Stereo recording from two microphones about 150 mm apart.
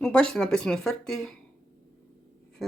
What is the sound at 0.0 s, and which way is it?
Speech, 5° left (ahead or behind).